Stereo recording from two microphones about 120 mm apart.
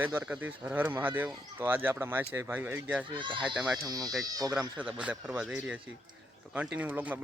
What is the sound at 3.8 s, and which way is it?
Speech, 30° right (ahead or behind).